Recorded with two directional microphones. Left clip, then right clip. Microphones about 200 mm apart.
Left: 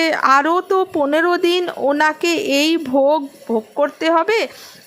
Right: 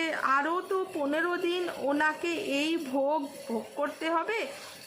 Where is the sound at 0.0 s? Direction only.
40° left (ahead or behind).